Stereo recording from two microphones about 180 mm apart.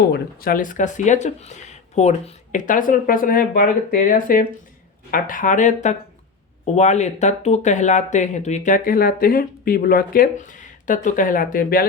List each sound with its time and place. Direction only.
0.1 s speech: 50° left (ahead or behind)